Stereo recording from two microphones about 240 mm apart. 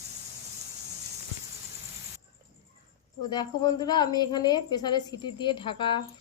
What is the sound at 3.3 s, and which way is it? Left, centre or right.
Speech, centre.